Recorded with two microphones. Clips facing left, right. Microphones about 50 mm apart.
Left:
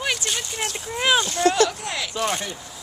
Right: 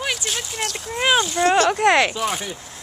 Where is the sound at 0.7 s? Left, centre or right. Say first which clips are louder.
Right 2 dB; centre.